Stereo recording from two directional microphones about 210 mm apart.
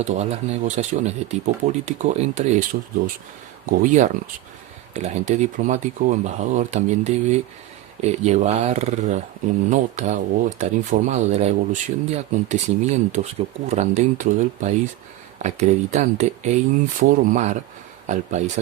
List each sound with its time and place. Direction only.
0.0 s speech: 30° right (ahead or behind)
3.7 s speech: 35° right (ahead or behind)